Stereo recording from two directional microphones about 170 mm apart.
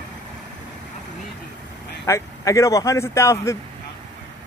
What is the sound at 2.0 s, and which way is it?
A man's voice, 20° left (ahead or behind).